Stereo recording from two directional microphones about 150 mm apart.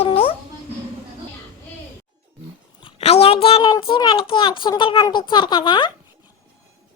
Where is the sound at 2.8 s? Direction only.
40° left (ahead or behind).